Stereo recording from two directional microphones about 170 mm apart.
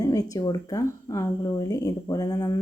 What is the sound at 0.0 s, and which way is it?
A woman's voice, 20° left (ahead or behind).